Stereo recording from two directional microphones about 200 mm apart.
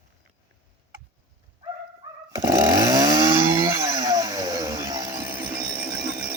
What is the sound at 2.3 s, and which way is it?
Chainsaw, 15° right (ahead or behind).